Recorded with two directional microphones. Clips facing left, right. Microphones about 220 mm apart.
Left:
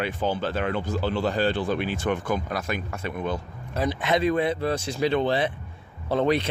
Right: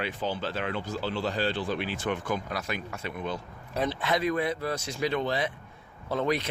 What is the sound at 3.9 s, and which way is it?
Speech, 20° left (ahead or behind).